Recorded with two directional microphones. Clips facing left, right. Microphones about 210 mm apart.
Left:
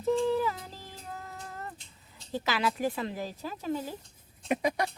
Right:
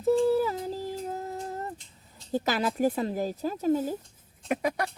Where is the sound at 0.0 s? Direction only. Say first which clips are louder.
Right 4 dB; 40° right (ahead or behind).